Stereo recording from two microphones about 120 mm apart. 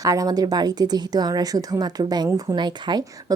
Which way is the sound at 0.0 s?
30° right (ahead or behind).